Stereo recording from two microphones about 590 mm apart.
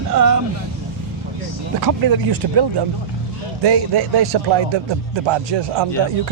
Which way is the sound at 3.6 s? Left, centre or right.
Right.